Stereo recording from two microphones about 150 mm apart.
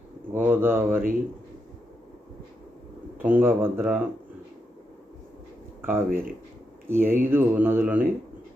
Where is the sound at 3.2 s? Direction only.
15° right (ahead or behind).